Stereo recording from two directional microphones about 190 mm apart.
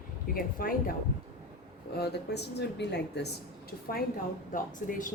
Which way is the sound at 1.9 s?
60° left (ahead or behind).